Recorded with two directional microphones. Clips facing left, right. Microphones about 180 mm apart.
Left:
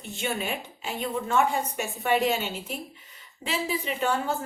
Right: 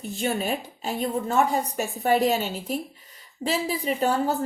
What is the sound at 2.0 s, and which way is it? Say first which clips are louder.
Speech: right 3 dB; 40° right (ahead or behind).